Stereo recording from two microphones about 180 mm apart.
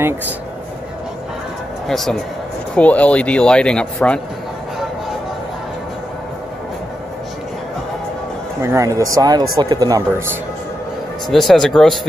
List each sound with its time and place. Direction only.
1.9 s speech: centre (ahead or behind)
8.6 s speech: 15° right (ahead or behind)
11.2 s speech: centre (ahead or behind)